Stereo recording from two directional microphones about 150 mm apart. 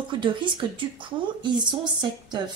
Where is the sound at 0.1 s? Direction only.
35° right (ahead or behind).